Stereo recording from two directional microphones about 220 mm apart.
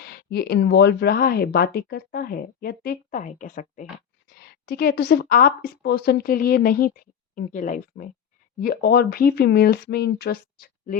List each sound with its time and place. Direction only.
0.0 s a woman's voice: 45° left (ahead or behind)